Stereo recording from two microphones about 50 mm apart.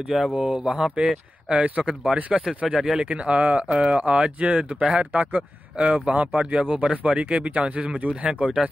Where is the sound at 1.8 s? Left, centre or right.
Centre.